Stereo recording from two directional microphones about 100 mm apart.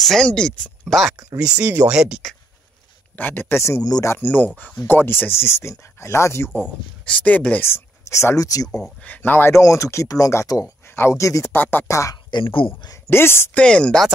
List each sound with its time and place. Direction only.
0.0 s speech: 5° left (ahead or behind)
1.4 s speech: 10° right (ahead or behind)
3.2 s speech: 20° left (ahead or behind)
4.1 s speech: 15° left (ahead or behind)
7.1 s speech: 15° left (ahead or behind); by 8.6 s 35° left (ahead or behind)
8.6 s speech: 5° left (ahead or behind)
9.0 s speech: 20° left (ahead or behind)
11.5 s speech: 20° left (ahead or behind)
11.9 s speech: 30° left (ahead or behind)
12.3 s speech: 55° left (ahead or behind)
12.8 s speech: 30° left (ahead or behind)
13.6 s speech: 10° left (ahead or behind)